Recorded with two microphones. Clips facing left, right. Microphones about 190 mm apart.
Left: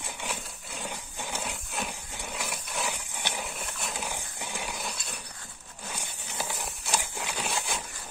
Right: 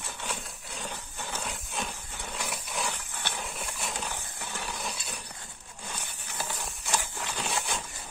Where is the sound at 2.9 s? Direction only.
15° left (ahead or behind).